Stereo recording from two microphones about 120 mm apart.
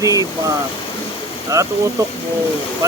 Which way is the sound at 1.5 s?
30° right (ahead or behind).